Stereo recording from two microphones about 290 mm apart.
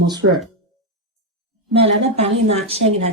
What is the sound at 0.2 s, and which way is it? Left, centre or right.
Speech, right.